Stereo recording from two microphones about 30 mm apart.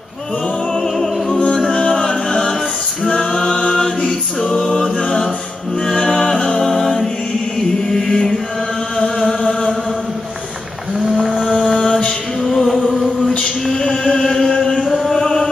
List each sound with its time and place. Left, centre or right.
0.7 s music: centre
1.7 s music: left
2.0 s music: left
3.3 s mantra: left
4.1 s a capella: centre
6.0 s music: centre
9.3 s chant: centre
11.4 s mantra: centre
12.4 s music: centre
12.6 s music: centre
14.0 s chant: centre
14.8 s a sound: centre
15.1 s mantra: centre